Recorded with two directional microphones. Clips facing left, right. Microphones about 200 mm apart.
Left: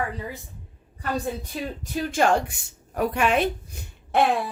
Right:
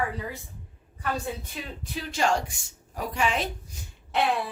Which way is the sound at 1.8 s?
50° left (ahead or behind).